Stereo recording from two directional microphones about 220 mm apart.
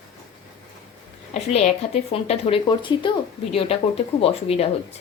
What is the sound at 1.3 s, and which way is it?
A woman's voice, 30° left (ahead or behind).